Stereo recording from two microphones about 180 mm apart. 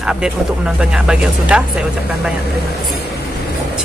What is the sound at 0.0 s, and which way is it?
Speech, 5° right (ahead or behind).